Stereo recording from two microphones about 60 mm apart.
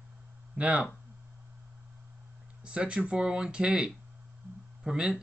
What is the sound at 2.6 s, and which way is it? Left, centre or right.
Speech, centre.